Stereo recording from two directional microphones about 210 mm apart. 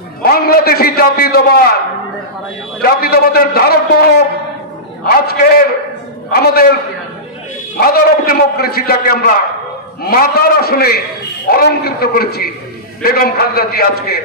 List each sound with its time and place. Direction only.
0.2 s a man's voice: 45° left (ahead or behind)
2.8 s a man's voice: 45° left (ahead or behind)
5.2 s a man's voice: 45° left (ahead or behind)
7.7 s a man's voice: 45° left (ahead or behind)